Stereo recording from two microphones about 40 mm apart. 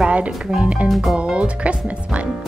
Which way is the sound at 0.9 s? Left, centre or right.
Centre.